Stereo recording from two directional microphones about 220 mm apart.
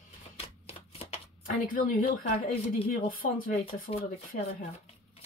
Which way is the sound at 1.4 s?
40° left (ahead or behind).